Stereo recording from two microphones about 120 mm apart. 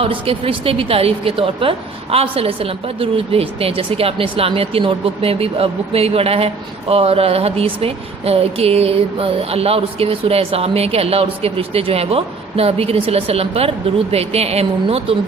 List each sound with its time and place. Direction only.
0.0 s speech: 50° right (ahead or behind)